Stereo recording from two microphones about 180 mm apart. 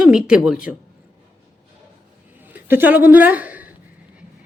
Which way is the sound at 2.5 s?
10° right (ahead or behind).